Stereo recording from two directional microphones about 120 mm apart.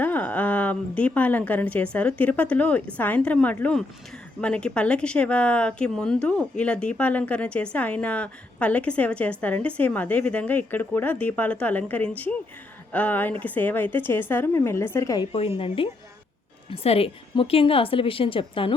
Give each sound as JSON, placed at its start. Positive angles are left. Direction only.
{"t": 0.0, "sound": "a woman's voice", "side_deg": 15}
{"t": 15.3, "sound": "a woman's voice", "side_deg": 55}